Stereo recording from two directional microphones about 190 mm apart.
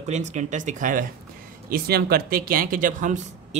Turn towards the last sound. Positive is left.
turn(degrees=-45)  # may be behind; listen again after turning